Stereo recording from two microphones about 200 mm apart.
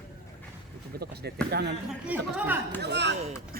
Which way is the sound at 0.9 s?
50° right (ahead or behind).